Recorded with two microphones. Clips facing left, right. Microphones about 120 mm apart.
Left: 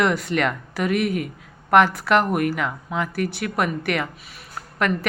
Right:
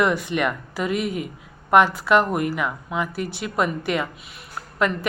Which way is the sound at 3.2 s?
65° left (ahead or behind).